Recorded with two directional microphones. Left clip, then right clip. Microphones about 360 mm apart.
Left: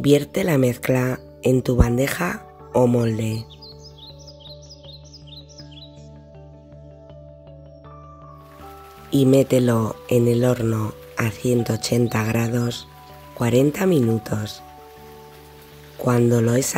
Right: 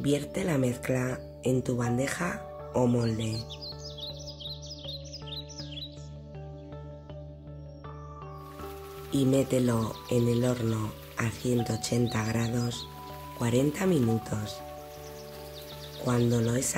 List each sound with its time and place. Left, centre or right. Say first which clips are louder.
0.0 s speech: left 11 dB; left
4.0 s music: right 3 dB; centre
9.1 s speech: left 10 dB; left
16.0 s speech: left 9 dB; left